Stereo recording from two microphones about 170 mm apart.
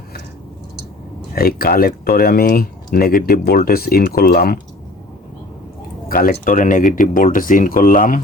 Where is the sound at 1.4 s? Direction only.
60° left (ahead or behind).